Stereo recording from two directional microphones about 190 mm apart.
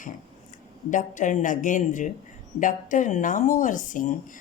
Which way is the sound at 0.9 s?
40° left (ahead or behind).